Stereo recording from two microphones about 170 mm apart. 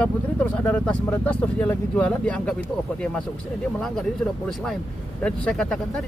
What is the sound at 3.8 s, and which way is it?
Speech, 5° left (ahead or behind).